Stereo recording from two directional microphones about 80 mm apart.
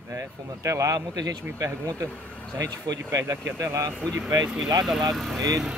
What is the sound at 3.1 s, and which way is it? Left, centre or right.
Speech, right.